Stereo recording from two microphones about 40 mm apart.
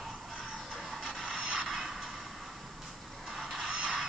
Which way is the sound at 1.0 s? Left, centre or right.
Right.